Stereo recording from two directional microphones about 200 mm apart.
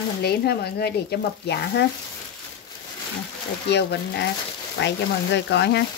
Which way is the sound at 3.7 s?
55° left (ahead or behind).